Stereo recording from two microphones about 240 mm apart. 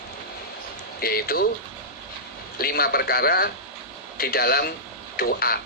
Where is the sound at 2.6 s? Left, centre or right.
Left.